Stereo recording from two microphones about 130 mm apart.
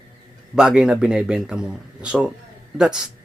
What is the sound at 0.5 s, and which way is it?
Speech, 5° right (ahead or behind).